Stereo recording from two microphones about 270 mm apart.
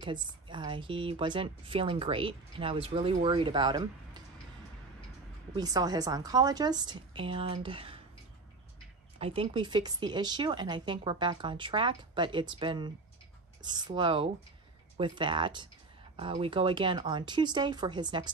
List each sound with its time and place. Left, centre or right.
0.0 s speech: centre
5.6 s speech: centre
9.2 s speech: centre